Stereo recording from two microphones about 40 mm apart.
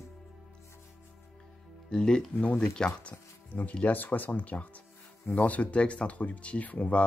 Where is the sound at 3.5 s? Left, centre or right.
Left.